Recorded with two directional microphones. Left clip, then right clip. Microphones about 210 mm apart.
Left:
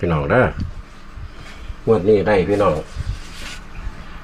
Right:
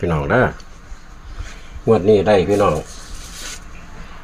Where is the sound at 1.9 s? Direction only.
30° right (ahead or behind).